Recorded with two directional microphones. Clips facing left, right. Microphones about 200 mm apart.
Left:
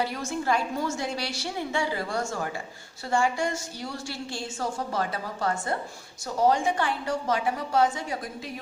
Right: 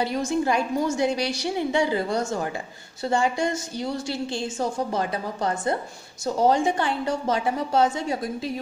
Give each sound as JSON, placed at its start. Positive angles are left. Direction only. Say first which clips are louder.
{"t": 0.0, "sound": "a woman's voice", "louder": "right 5 dB", "side_deg": -20}